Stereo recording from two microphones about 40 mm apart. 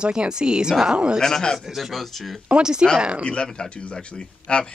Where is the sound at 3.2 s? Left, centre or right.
Left.